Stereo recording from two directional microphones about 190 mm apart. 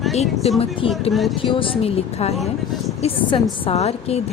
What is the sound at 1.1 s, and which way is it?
Speech, centre (ahead or behind).